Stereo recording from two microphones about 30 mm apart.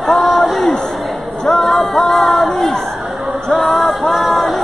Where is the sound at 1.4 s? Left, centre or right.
Centre.